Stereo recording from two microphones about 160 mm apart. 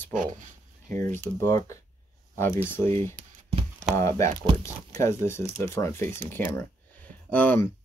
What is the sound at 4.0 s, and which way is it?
Speech, 20° left (ahead or behind).